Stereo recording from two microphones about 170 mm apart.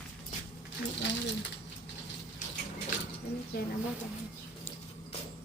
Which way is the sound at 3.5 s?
65° left (ahead or behind).